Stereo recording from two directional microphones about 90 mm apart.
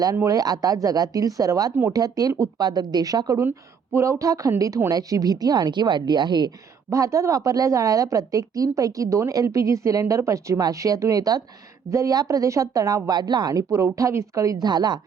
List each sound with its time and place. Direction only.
0.3 s a woman's voice: 45° right (ahead or behind)
6.9 s a woman's voice: 35° right (ahead or behind); by 14.9 s 50° right (ahead or behind)